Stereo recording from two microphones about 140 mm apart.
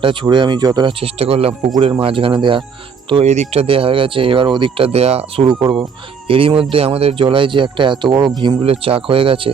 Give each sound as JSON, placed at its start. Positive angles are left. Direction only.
{"t": 0.0, "sound": "speech", "side_deg": -35}
{"t": 3.2, "sound": "speech", "side_deg": -55}